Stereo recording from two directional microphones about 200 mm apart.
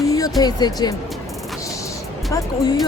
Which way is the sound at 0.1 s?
20° left (ahead or behind).